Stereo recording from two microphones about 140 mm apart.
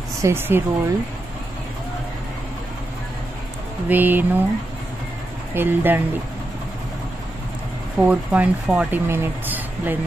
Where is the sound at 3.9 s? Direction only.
15° right (ahead or behind).